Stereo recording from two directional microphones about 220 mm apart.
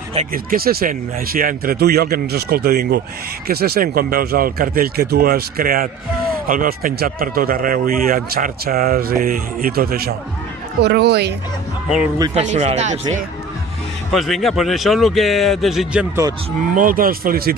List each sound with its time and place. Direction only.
0.1 s speech: 35° right (ahead or behind)
12.4 s speech: 30° right (ahead or behind)
14.1 s speech: centre (ahead or behind)
16.7 s speech: 40° right (ahead or behind)